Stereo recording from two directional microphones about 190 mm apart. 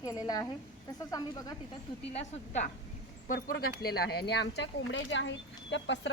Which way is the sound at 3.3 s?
50° left (ahead or behind).